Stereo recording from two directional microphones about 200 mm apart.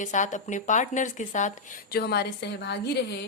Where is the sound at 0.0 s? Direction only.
35° left (ahead or behind).